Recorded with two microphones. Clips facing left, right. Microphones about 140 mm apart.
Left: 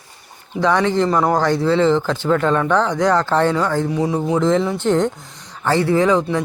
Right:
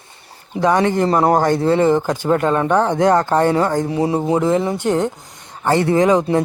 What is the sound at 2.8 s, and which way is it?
Speech, 55° right (ahead or behind).